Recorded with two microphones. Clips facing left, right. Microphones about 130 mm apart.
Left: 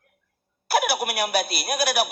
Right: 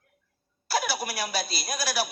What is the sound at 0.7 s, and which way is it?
Speech, 60° left (ahead or behind).